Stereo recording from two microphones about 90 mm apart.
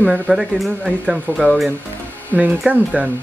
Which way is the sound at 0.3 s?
5° right (ahead or behind).